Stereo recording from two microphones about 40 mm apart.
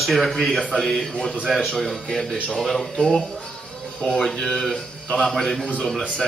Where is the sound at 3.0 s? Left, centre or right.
Centre.